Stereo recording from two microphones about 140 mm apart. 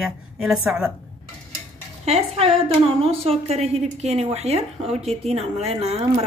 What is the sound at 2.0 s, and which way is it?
Speech, 50° right (ahead or behind).